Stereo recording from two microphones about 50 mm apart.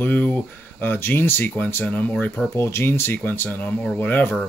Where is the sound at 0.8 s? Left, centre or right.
Left.